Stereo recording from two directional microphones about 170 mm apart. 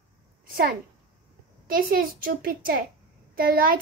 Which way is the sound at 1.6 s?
55° right (ahead or behind).